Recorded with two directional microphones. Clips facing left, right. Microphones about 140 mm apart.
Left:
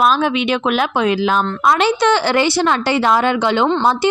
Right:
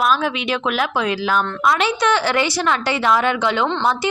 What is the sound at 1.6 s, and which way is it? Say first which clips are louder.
A woman's voice: left 5 dB; 35° left (ahead or behind).